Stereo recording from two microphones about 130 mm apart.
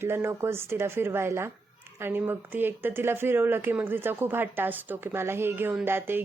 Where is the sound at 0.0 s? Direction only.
20° right (ahead or behind).